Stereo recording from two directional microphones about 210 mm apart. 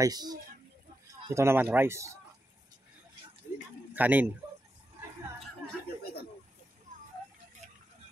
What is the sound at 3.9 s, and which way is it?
Speech, 10° right (ahead or behind).